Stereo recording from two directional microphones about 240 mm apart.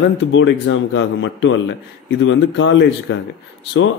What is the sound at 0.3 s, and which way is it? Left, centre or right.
Speech, left.